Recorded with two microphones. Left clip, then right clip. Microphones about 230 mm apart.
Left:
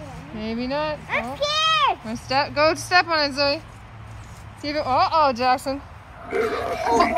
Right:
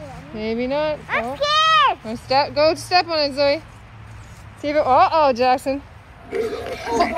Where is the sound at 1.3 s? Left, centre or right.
Centre.